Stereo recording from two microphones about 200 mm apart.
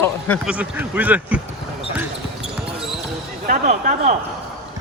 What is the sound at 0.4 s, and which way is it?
Speech, 5° right (ahead or behind).